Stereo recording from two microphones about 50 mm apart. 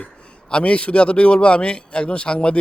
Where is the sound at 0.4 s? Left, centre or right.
Left.